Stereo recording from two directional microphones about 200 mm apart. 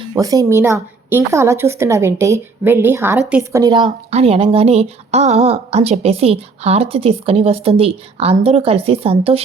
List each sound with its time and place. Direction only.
0.0 s a woman's voice: 15° right (ahead or behind)
3.6 s speech: 25° right (ahead or behind)